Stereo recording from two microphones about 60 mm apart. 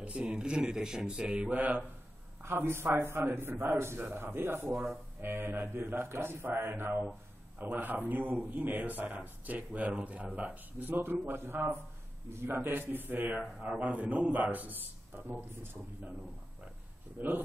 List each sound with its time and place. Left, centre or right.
0.0 s speech: centre
2.4 s a man's voice: right; by 10.5 s centre
10.5 s a man's voice: right
17.2 s a man's voice: right